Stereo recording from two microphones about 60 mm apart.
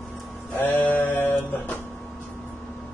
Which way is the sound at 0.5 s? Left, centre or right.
Left.